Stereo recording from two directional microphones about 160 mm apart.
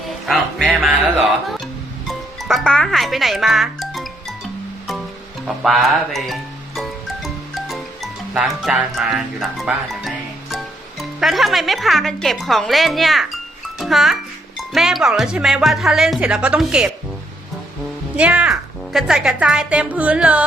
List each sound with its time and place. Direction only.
0.3 s speech: centre (ahead or behind)
2.0 s music: centre (ahead or behind)
5.6 s music: centre (ahead or behind)
8.3 s speech: 5° right (ahead or behind)
11.2 s a child's voice: centre (ahead or behind)
18.2 s speech: 10° right (ahead or behind)